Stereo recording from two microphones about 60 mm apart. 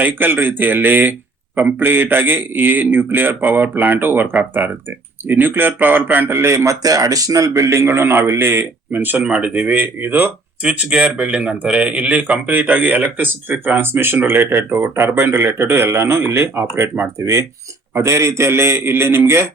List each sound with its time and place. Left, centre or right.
0.0 s speech: right
6.5 s a man's voice: right
9.2 s speech: centre; by 10.3 s right
10.6 s speech: centre
12.5 s speech: right
17.2 s a man's voice: right